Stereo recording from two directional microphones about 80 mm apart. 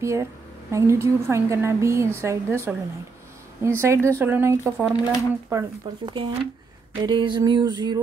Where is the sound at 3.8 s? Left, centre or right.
Right.